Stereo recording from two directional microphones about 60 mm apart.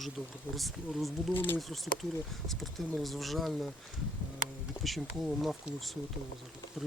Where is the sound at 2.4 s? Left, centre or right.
Centre.